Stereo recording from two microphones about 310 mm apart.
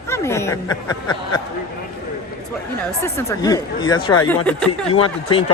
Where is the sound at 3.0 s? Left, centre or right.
Centre.